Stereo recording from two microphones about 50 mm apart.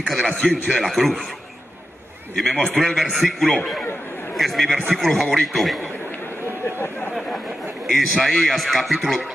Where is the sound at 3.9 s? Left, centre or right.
Left.